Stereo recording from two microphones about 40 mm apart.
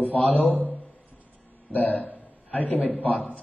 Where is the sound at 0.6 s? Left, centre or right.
Left.